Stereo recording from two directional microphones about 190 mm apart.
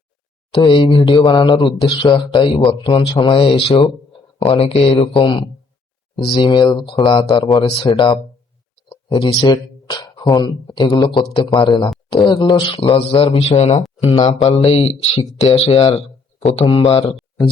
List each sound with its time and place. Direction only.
0.5 s speech: 25° left (ahead or behind)
8.9 s a sound: 30° left (ahead or behind)
9.5 s speech: 20° left (ahead or behind)
12.7 s speech: 30° left (ahead or behind)